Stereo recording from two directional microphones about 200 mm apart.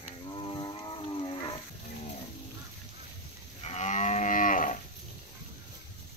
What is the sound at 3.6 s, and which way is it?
Moo, 35° left (ahead or behind).